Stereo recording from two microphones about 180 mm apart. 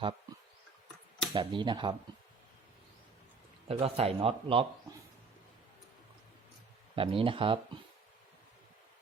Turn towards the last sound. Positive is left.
turn(degrees=-30)  # may be behind; listen again after turning